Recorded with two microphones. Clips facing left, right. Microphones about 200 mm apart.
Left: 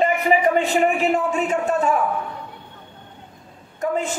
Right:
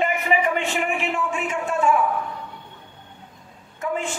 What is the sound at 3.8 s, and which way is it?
Speech, 40° left (ahead or behind).